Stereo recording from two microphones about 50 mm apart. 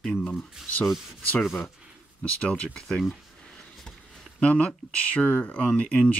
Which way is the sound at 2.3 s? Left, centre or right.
Left.